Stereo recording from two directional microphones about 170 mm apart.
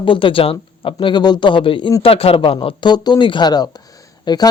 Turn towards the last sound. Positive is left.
turn(degrees=25)  # may be behind; listen again after turning